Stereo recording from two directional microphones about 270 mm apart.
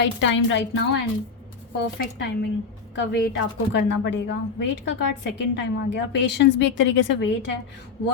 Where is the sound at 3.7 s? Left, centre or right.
Left.